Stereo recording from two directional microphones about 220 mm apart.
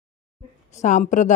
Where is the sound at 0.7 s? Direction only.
35° left (ahead or behind).